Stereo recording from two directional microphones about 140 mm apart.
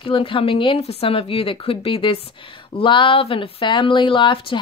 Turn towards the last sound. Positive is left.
turn(degrees=35)  # may be behind; listen again after turning